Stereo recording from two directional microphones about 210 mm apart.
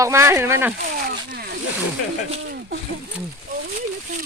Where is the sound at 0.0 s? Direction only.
15° right (ahead or behind).